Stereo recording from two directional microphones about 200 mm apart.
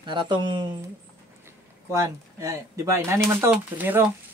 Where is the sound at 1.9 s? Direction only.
15° right (ahead or behind).